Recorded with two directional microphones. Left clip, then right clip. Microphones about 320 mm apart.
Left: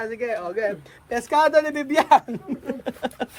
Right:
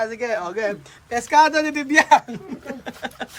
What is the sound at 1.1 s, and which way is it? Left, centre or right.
Speech, centre.